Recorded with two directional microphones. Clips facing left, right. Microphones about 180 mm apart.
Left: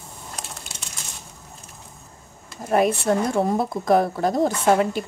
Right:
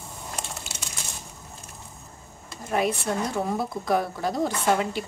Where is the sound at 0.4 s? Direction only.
Centre (ahead or behind).